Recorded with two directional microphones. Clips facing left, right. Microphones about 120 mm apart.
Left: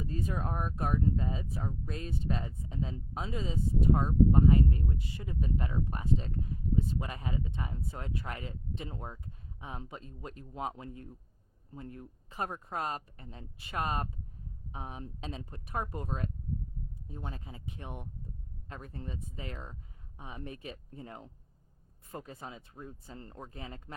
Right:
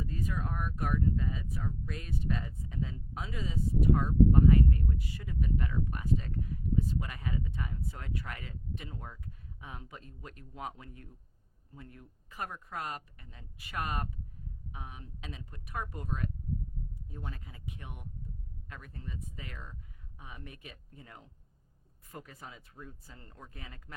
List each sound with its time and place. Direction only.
0.0 s speech: 30° left (ahead or behind)